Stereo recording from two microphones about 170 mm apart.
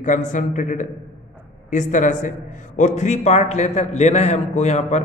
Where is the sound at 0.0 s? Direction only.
45° left (ahead or behind).